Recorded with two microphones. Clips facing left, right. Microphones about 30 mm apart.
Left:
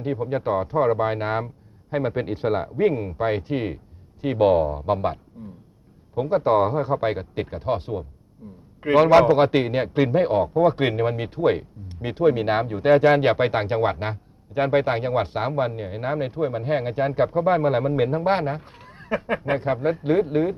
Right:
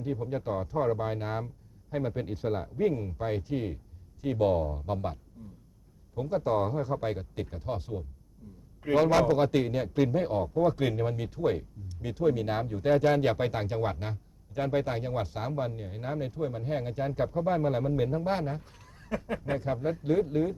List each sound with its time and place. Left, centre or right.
0.0 s a man's voice: left